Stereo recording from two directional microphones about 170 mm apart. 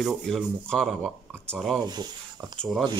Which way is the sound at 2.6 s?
Centre (ahead or behind).